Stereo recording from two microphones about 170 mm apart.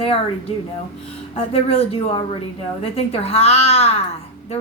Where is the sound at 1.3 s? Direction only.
35° left (ahead or behind).